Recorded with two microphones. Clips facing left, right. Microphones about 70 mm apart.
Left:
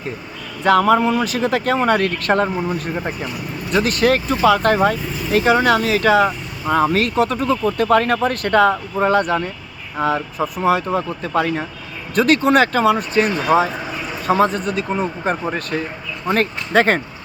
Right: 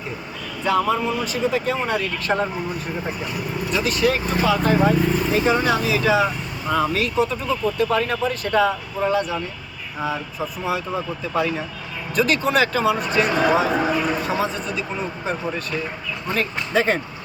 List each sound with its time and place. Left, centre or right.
0.6 s speech: left
3.7 s speech: left
14.3 s speech: left